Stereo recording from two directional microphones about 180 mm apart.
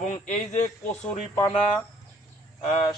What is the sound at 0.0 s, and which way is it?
Speech, 45° left (ahead or behind).